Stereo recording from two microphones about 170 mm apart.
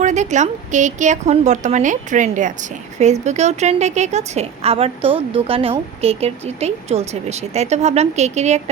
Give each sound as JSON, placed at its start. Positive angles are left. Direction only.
{"t": 0.0, "sound": "a woman's voice", "side_deg": -45}